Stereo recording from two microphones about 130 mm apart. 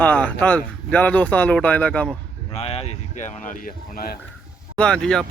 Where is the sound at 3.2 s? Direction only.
80° left.